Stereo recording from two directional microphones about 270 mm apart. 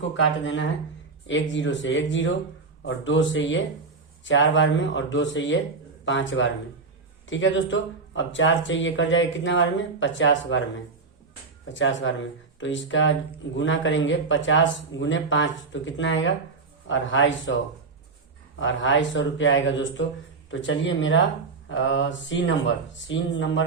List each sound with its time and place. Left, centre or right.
0.2 s speech: left
11.7 s speech: left
18.6 s speech: left